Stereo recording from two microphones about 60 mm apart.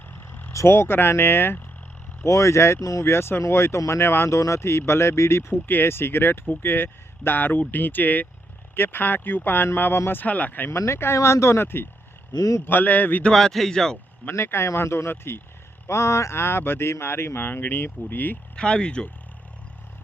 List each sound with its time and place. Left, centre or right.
0.1 s a sound: left
0.5 s speech: left
2.2 s speech: left
3.1 s speech: left
4.3 s speech: left
4.6 s speech: left
10.7 s speech: left
12.4 s a man's voice: left
12.6 s speech: left
13.3 s speech: centre
14.3 s speech: left
15.9 s speech: left
17.4 s speech: left
18.5 s speech: centre